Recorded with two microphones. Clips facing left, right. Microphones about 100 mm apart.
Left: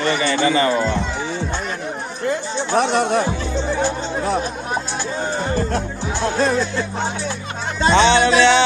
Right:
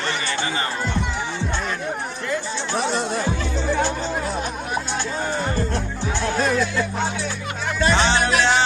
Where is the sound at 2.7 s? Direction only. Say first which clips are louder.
Left 7 dB; 60° left (ahead or behind).